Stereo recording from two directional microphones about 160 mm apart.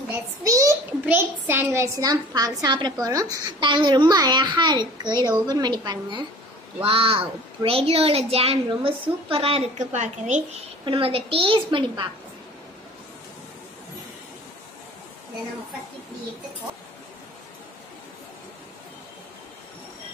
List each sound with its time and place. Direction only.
0.4 s a child's voice: 20° right (ahead or behind); by 10.4 s 50° right (ahead or behind)
10.9 s speech: 35° right (ahead or behind)